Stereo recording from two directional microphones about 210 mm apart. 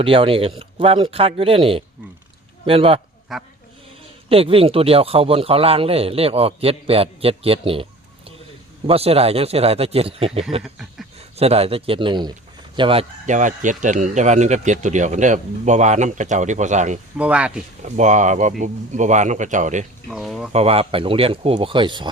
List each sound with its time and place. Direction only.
0.0 s a man's voice: 25° right (ahead or behind)
3.3 s speech: centre (ahead or behind)
4.3 s a man's voice: 25° right (ahead or behind)
8.9 s a man's voice: 30° right (ahead or behind)
10.6 s speech: centre (ahead or behind)
11.3 s a man's voice: 30° right (ahead or behind)
17.2 s speech: 5° right (ahead or behind)
17.8 s speech: 35° right (ahead or behind)
20.1 s speech: centre (ahead or behind)
20.5 s a man's voice: 30° right (ahead or behind)